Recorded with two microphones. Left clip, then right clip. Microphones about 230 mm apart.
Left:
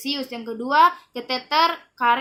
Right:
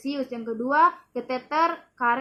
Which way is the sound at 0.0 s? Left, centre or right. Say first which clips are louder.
Left 2 dB; centre.